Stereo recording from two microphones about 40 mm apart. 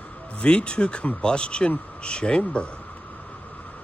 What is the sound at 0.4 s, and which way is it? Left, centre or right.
A man's voice, left.